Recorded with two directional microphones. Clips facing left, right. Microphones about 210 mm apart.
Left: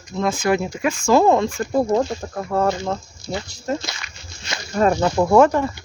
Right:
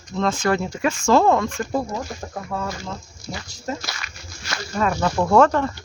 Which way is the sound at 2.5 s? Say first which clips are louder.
Left 9 dB; 65° left (ahead or behind).